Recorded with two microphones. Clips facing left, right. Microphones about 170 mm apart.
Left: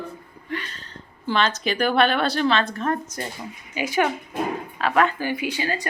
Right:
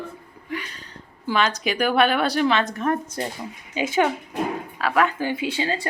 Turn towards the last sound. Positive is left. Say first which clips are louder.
# right 1 dB
turn(degrees=-25)  # may be behind; listen again after turning